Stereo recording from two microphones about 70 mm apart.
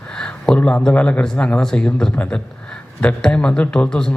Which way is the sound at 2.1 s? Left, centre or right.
Centre.